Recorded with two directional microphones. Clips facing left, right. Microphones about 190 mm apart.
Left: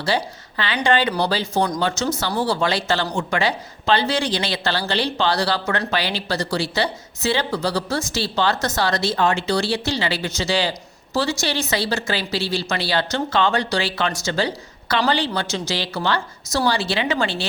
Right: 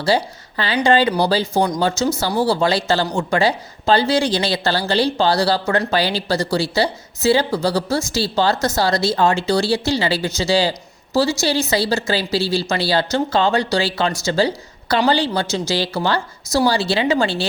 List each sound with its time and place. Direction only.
0.0 s speech: 35° right (ahead or behind)